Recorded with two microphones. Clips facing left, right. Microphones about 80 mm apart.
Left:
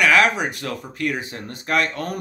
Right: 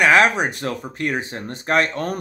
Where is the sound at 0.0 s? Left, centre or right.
Right.